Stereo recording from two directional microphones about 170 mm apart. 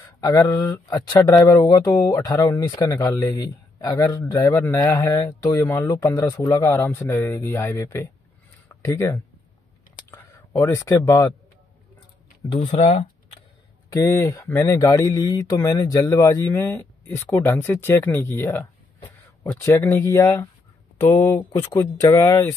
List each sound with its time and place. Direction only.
0.0 s speech: 20° left (ahead or behind)
12.4 s speech: 30° left (ahead or behind)
14.0 s speech: 15° left (ahead or behind)